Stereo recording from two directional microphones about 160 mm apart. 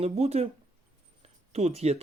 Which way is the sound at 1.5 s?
40° right (ahead or behind).